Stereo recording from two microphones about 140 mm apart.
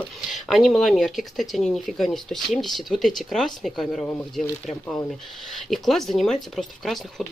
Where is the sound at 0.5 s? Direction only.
Centre (ahead or behind).